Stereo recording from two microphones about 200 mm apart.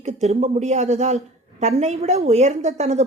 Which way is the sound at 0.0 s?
35° right (ahead or behind).